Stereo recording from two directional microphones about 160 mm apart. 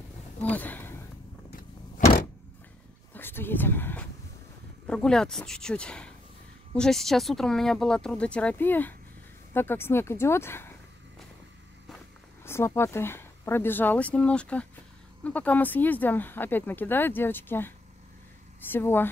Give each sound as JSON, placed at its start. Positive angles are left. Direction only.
{"t": 0.4, "sound": "speech", "side_deg": 10}
{"t": 2.0, "sound": "vehicle", "side_deg": 50}
{"t": 3.1, "sound": "a sound", "side_deg": 15}
{"t": 4.8, "sound": "speech", "side_deg": 5}
{"t": 12.4, "sound": "speech", "side_deg": 15}